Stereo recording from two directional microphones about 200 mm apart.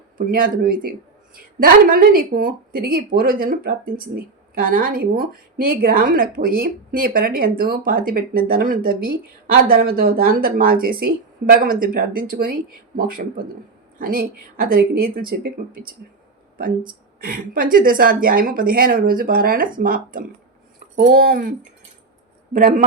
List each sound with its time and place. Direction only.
0.2 s speech: 45° right (ahead or behind)
17.2 s speech: 45° right (ahead or behind)
22.5 s speech: 45° right (ahead or behind)